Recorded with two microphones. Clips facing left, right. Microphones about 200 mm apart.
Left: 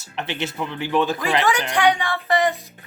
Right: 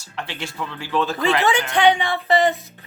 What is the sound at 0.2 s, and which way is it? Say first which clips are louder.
Speech: left 3 dB; 20° left (ahead or behind).